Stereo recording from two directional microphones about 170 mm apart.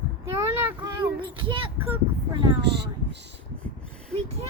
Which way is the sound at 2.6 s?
90° right.